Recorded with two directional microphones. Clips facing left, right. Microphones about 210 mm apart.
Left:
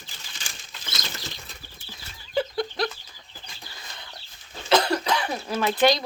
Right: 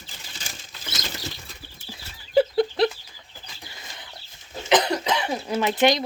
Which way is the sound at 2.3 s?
30° right (ahead or behind).